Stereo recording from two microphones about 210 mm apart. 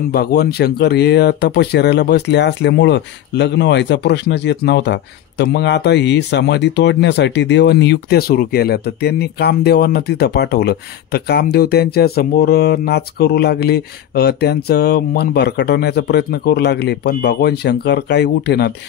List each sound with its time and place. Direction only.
0.1 s speech: 50° left (ahead or behind)